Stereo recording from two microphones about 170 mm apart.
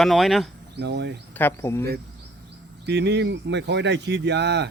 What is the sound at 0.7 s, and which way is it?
Speech, 80° right.